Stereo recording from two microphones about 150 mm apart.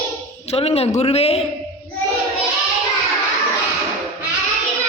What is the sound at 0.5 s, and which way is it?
Speech, 40° left (ahead or behind).